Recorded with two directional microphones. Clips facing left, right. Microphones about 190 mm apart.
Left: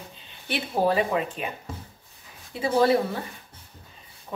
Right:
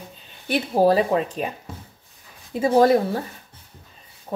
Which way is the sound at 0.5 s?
35° right (ahead or behind).